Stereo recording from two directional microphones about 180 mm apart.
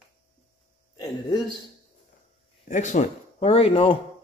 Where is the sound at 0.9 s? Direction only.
25° left (ahead or behind).